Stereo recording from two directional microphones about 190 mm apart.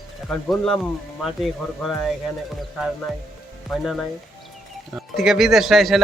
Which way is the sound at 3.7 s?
Centre (ahead or behind).